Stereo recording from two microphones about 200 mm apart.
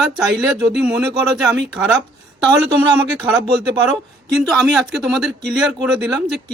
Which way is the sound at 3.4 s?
20° right (ahead or behind).